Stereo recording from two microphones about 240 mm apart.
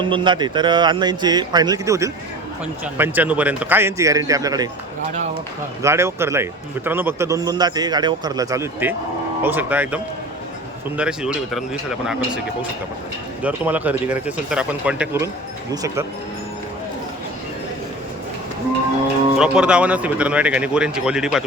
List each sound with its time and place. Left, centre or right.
0.0 s a man's voice: centre
5.8 s a man's voice: centre
13.4 s a man's voice: centre
19.4 s a man's voice: centre